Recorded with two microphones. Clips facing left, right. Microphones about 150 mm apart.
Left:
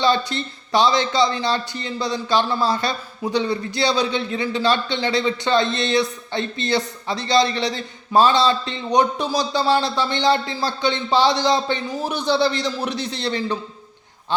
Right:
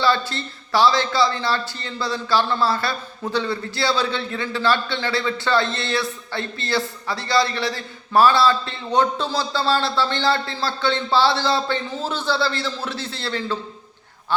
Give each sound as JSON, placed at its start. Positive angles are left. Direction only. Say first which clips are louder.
{"t": 0.0, "sound": "a man's voice", "louder": "left 1 dB", "side_deg": 20}